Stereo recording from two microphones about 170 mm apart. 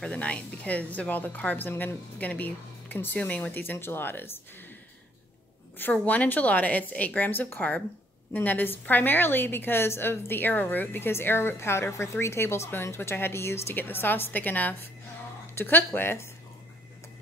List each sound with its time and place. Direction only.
0.0 s a woman's voice: 5° left (ahead or behind)
5.9 s a woman's voice: 10° left (ahead or behind)